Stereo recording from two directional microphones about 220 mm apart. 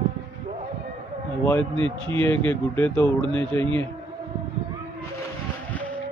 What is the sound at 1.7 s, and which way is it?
Speech, 25° right (ahead or behind).